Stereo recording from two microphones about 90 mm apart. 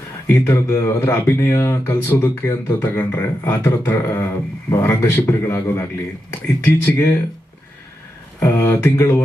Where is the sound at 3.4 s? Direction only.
30° left (ahead or behind).